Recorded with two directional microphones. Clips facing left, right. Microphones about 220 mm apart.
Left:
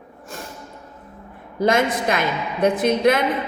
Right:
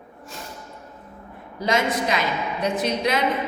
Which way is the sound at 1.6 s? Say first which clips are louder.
Left 4 dB; 50° left (ahead or behind).